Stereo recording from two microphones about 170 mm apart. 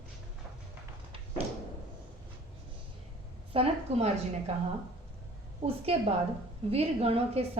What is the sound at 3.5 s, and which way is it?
A man's voice, 35° right (ahead or behind).